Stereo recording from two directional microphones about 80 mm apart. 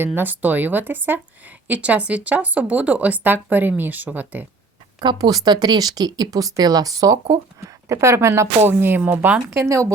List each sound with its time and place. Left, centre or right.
0.0 s speech: right
4.9 s speech: right
9.5 s speech: right